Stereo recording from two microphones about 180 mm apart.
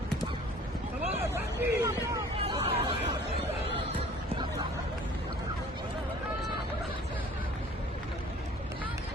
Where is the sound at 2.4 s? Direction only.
30° right (ahead or behind).